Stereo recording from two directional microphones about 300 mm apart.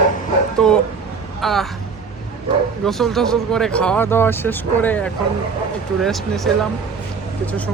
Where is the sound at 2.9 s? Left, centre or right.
Centre.